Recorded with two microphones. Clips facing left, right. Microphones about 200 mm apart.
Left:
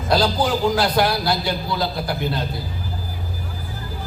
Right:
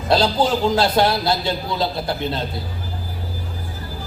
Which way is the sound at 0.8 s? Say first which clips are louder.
Right 2 dB; 25° right (ahead or behind).